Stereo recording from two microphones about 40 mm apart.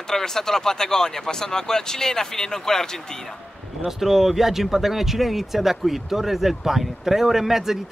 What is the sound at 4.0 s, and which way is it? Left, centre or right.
A man's voice, centre.